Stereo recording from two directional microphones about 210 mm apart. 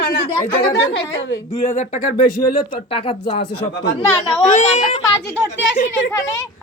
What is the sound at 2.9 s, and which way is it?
Speech, 25° left (ahead or behind).